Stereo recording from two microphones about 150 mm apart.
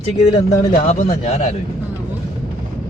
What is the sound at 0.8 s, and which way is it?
Speech, 50° left (ahead or behind).